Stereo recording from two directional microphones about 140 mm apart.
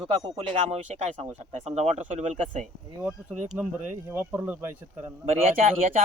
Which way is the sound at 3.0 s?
10° right (ahead or behind).